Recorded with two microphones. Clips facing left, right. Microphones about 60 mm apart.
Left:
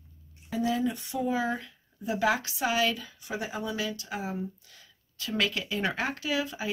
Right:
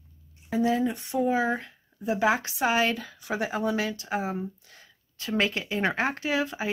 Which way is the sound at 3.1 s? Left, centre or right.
Right.